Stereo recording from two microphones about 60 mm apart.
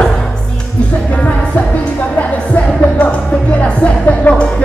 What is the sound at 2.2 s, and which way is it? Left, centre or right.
Music, left.